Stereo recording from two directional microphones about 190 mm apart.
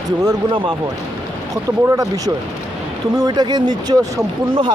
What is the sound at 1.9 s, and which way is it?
Speech, 15° right (ahead or behind).